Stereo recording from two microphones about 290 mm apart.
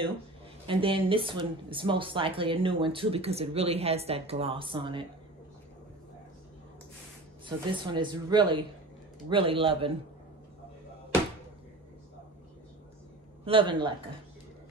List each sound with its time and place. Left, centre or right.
0.7 s speech: centre
7.4 s speech: centre
13.5 s speech: centre